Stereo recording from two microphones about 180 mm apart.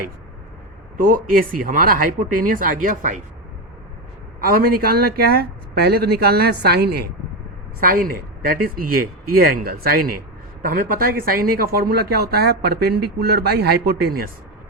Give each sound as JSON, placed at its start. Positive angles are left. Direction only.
{"t": 0.9, "sound": "speech", "side_deg": -50}
{"t": 4.4, "sound": "speech", "side_deg": -55}
{"t": 7.8, "sound": "speech", "side_deg": -50}